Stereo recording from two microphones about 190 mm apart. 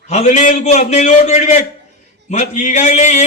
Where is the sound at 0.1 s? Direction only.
40° left (ahead or behind).